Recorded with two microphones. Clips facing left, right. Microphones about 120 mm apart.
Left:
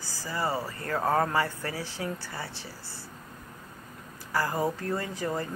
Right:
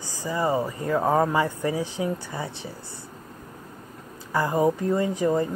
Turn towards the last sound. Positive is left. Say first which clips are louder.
# right 9 dB
turn(degrees=-20)  # may be behind; listen again after turning